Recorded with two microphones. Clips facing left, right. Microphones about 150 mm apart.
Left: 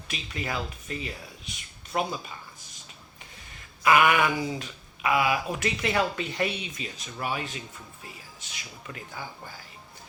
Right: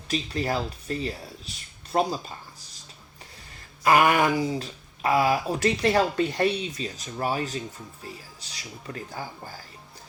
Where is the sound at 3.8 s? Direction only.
35° right (ahead or behind).